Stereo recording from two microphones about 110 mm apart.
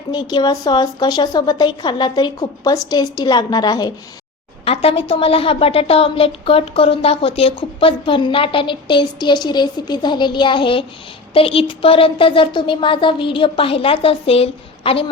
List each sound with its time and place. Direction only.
0.1 s a woman's voice: 40° left (ahead or behind)
4.6 s a woman's voice: 65° left (ahead or behind)